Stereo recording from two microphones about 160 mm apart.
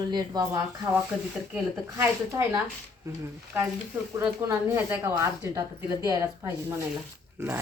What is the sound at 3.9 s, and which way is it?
A woman's voice, 15° right (ahead or behind).